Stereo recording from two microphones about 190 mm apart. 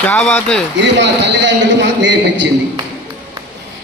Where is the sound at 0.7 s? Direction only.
70° right (ahead or behind).